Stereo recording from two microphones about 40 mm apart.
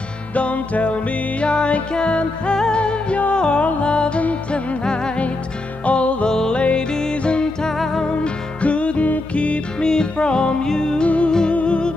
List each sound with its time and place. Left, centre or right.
0.3 s music: left
5.9 s music: left
6.3 s music: centre
7.7 s music: centre
8.5 s music: left
11.1 s music: left